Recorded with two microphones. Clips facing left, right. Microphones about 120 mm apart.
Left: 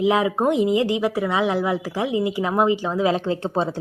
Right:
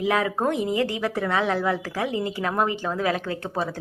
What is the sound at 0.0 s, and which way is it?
Speech, 15° left (ahead or behind).